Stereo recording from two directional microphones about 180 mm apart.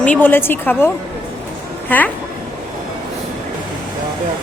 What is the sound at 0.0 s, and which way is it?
Speech, 10° left (ahead or behind).